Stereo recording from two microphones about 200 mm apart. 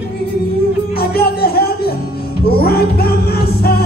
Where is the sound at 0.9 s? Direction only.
50° left (ahead or behind).